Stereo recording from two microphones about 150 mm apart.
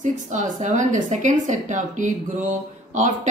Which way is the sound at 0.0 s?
55° right (ahead or behind).